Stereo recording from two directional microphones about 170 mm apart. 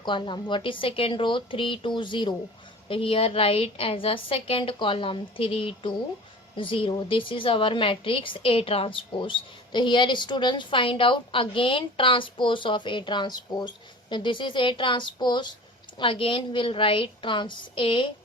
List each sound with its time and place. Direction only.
0.0 s a woman's voice: 30° left (ahead or behind)